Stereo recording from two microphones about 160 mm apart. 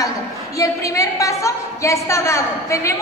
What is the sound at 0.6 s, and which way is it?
A woman's voice, 20° left (ahead or behind).